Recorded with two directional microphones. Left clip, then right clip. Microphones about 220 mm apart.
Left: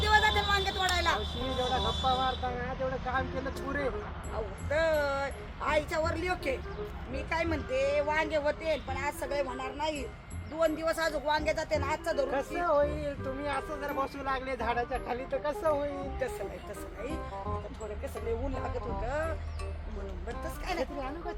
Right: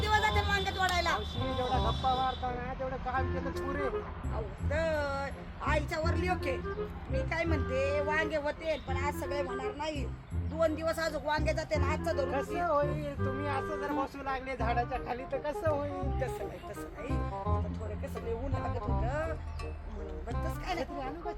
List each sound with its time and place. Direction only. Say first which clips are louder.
0.0 s a sound: left 3 dB; centre (ahead or behind)
2.1 s vehicle: left 1 dB; 10° left (ahead or behind)
4.7 s speech: left 4 dB; centre (ahead or behind)
18.5 s speech: even; centre (ahead or behind)
20.4 s speech: left 2 dB; centre (ahead or behind)